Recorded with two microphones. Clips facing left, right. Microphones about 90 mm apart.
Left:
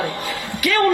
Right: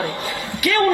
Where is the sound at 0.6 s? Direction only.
20° right (ahead or behind).